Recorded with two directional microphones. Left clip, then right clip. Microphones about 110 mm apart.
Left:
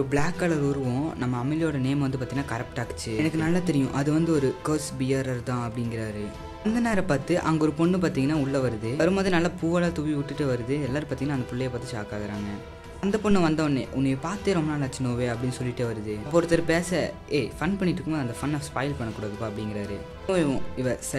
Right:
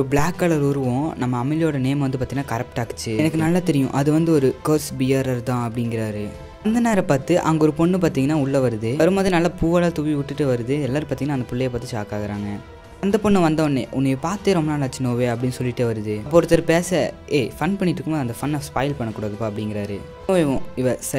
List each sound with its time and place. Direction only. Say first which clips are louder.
0.1 s speech: right 6 dB; 45° right (ahead or behind)
13.0 s speech: right 6 dB; 30° right (ahead or behind)